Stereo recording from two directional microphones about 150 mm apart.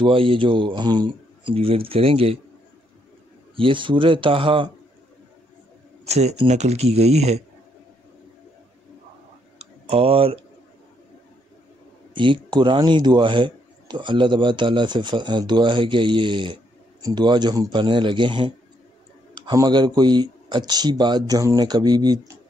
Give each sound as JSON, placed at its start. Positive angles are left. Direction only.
{"t": 0.0, "sound": "a man's voice", "side_deg": -35}
{"t": 3.5, "sound": "a man's voice", "side_deg": -35}
{"t": 6.0, "sound": "speech", "side_deg": -45}
{"t": 9.6, "sound": "tick-tock", "side_deg": -45}
{"t": 12.4, "sound": "a man's voice", "side_deg": -30}